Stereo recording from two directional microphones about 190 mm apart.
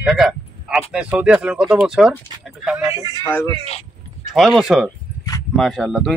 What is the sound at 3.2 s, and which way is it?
Speech, 15° left (ahead or behind).